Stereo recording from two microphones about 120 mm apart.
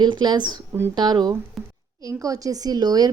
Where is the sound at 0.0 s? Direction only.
35° right (ahead or behind).